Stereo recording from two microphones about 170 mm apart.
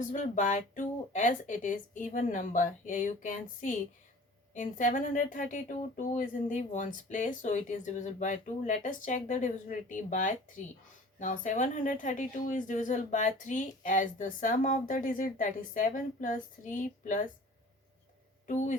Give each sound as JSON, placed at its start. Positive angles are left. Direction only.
{"t": 0.0, "sound": "speech", "side_deg": 50}
{"t": 18.4, "sound": "speech", "side_deg": 45}